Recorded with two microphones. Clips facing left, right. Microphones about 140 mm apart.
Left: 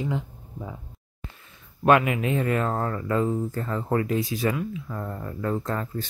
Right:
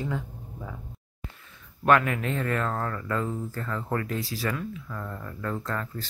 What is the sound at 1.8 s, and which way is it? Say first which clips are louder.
Speech: left 3 dB; 15° left (ahead or behind).